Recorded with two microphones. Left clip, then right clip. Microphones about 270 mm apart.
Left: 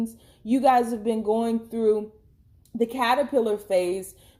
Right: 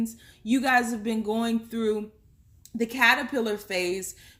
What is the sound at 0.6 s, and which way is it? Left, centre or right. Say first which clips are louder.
Speech: left 4 dB; right.